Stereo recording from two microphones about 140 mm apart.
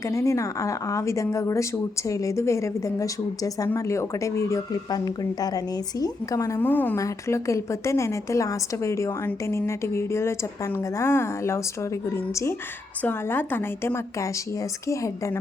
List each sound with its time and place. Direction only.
0.0 s a woman's voice: 20° left (ahead or behind)